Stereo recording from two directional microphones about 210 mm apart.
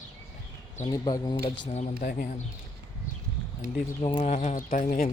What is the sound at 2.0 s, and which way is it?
Speech, 40° left (ahead or behind).